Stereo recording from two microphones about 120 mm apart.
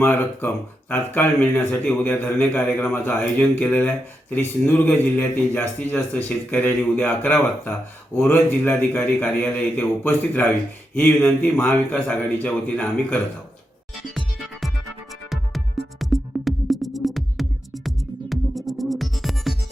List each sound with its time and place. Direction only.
0.0 s speech: 15° left (ahead or behind)
15.3 s music: centre (ahead or behind)